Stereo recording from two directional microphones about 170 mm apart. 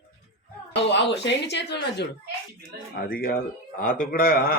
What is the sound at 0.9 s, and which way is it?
Speech, 90° left.